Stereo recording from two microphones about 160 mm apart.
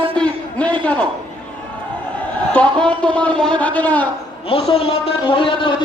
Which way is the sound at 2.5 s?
5° left (ahead or behind).